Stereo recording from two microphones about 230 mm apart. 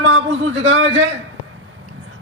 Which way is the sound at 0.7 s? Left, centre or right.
Right.